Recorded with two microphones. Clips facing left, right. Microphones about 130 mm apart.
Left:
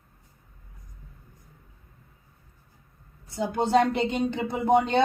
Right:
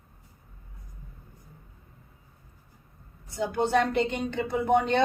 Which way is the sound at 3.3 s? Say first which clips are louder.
Left 2 dB; 25° left (ahead or behind).